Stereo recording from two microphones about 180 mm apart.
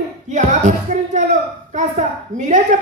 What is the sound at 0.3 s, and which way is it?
A woman's voice, 40° right (ahead or behind).